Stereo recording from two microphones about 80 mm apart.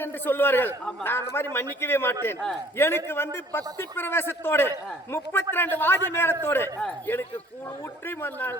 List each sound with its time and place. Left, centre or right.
0.0 s a man's voice: left
8.0 s a man's voice: left